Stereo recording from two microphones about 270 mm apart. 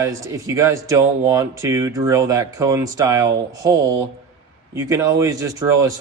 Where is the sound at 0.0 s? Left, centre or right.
Centre.